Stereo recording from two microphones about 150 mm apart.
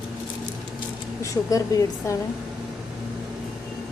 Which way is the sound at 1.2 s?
25° left (ahead or behind).